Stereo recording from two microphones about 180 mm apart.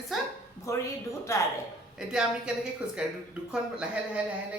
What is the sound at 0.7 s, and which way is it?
Speech, 15° left (ahead or behind).